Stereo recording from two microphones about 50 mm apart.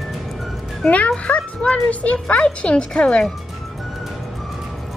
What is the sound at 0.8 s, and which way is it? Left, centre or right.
Speech, left.